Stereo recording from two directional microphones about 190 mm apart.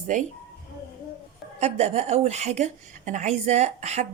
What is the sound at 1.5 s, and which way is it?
Speech, 35° right (ahead or behind).